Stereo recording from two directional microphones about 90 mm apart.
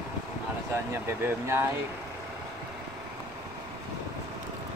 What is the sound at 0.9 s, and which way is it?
Speech, 25° right (ahead or behind).